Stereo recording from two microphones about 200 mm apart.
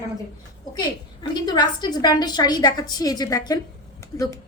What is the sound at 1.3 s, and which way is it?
A woman's voice, 20° left (ahead or behind).